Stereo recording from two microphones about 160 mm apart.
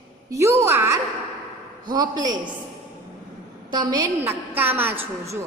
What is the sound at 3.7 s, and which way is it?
Speech, 25° right (ahead or behind).